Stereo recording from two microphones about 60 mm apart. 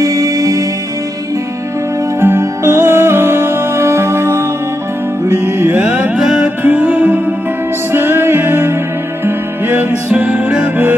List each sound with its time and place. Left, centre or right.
0.0 s music: right
2.1 s music: right
6.1 s music: centre
6.4 s music: right